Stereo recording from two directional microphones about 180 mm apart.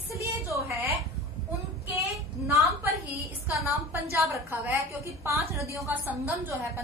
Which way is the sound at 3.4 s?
15° right (ahead or behind).